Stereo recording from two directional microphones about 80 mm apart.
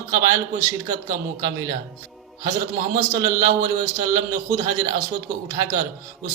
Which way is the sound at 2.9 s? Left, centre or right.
Right.